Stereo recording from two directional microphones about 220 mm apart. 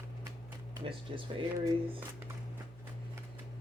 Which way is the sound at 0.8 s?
25° right (ahead or behind).